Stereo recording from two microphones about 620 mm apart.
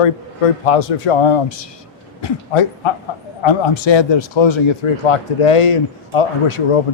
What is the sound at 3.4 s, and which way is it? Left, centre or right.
Speech, left.